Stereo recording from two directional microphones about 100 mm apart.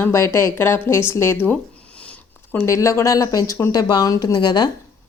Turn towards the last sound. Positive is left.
turn(degrees=45)  # may be behind; listen again after turning